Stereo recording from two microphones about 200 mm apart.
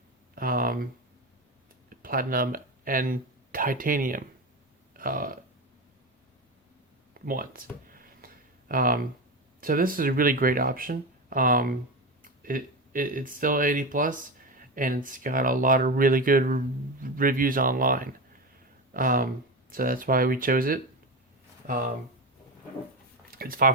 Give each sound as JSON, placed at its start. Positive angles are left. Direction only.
{"t": 0.3, "sound": "a sound", "side_deg": -45}
{"t": 1.9, "sound": "speech", "side_deg": -45}
{"t": 4.9, "sound": "burping", "side_deg": -45}
{"t": 7.1, "sound": "a sound", "side_deg": -45}
{"t": 9.6, "sound": "speech", "side_deg": -45}
{"t": 23.3, "sound": "speech", "side_deg": -45}